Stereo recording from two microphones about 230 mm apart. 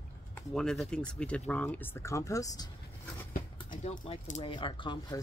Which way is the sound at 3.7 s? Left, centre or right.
Left.